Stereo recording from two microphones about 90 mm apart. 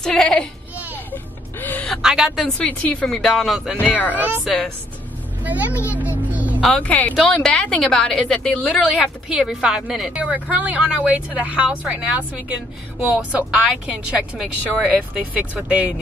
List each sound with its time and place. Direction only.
0.0 s a woman's voice: 5° left (ahead or behind)
0.9 s music: 20° left (ahead or behind)
2.0 s a sound: 5° right (ahead or behind)
2.3 s a woman's voice: 10° left (ahead or behind)
3.2 s speech: centre (ahead or behind)
3.8 s a woman's voice: 20° left (ahead or behind)
4.1 s a woman's voice: 20° right (ahead or behind)
5.4 s a woman's voice: 20° right (ahead or behind)
5.8 s speech: 30° left (ahead or behind)
6.3 s music: 20° right (ahead or behind)
6.8 s a woman's voice: 15° left (ahead or behind)
8.8 s speech: centre (ahead or behind); by 15.9 s 15° right (ahead or behind)